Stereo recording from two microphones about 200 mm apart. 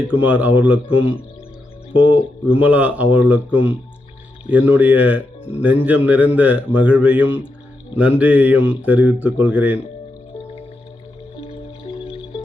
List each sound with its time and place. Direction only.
0.0 s speech: 5° right (ahead or behind)
2.6 s speech: 5° right (ahead or behind)
11.3 s music: 30° left (ahead or behind)